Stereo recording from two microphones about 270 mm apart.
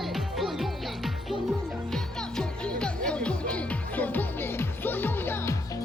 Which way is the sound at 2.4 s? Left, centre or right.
Centre.